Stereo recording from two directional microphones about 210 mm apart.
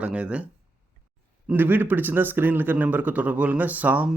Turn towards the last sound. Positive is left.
turn(degrees=-5)  # may be behind; listen again after turning